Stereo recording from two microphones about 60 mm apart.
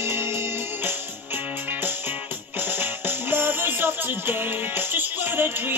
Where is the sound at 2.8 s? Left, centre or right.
Right.